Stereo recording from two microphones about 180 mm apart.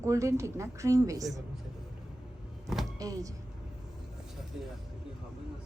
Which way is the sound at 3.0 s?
20° right (ahead or behind).